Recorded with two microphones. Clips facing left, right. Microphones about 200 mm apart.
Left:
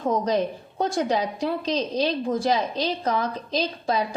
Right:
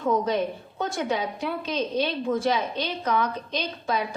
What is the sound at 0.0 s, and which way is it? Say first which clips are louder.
A woman's voice: left 1 dB; 35° left (ahead or behind).